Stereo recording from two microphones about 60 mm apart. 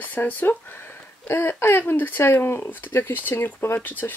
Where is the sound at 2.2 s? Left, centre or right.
Left.